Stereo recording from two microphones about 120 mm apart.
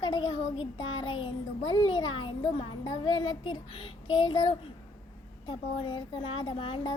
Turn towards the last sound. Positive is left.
turn(degrees=50)  # may be behind; listen again after turning